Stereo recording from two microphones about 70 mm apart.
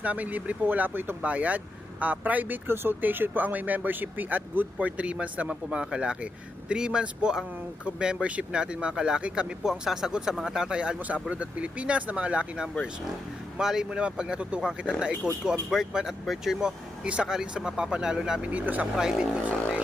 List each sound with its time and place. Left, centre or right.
0.0 s speech: right
18.9 s speech: centre